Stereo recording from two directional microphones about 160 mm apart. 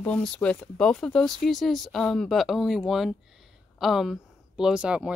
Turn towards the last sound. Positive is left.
turn(degrees=-5)  # may be behind; listen again after turning